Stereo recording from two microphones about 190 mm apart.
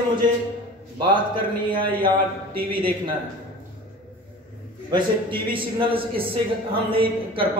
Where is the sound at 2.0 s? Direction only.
50° right (ahead or behind).